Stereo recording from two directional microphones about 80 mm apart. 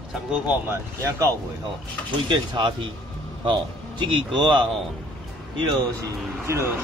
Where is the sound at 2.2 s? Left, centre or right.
Right.